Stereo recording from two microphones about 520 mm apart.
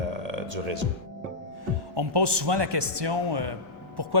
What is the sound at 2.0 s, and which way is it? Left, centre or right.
Speech, right.